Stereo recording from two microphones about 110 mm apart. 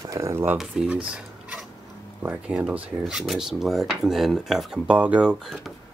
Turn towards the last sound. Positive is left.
turn(degrees=-5)  # may be behind; listen again after turning